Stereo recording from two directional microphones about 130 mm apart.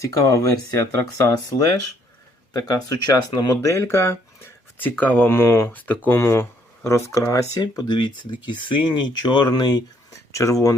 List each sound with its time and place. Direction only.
0.0 s speech: 25° left (ahead or behind)
2.5 s speech: 30° left (ahead or behind)
5.7 s speech: 15° left (ahead or behind)